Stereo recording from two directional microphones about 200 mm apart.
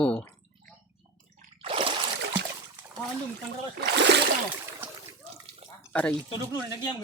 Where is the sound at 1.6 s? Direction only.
30° right (ahead or behind).